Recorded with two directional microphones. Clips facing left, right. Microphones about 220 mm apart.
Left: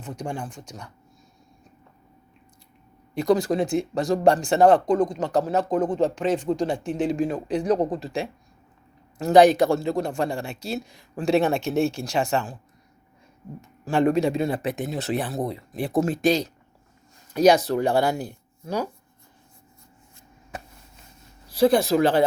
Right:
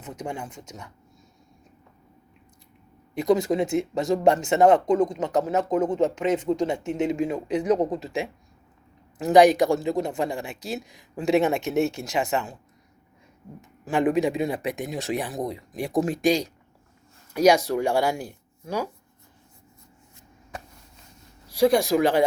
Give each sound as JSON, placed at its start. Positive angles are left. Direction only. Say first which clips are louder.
{"t": 0.0, "sound": "speech", "louder": "left 2 dB", "side_deg": -20}
{"t": 3.2, "sound": "speech", "louder": "even", "side_deg": -20}
{"t": 13.6, "sound": "speech", "louder": "left 2 dB", "side_deg": -15}
{"t": 21.5, "sound": "speech", "louder": "left 1 dB", "side_deg": -10}